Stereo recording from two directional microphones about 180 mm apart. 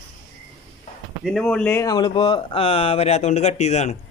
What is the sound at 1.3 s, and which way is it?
Speech, 5° left (ahead or behind).